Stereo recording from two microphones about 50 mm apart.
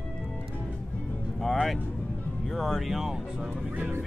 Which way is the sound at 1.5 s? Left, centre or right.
Centre.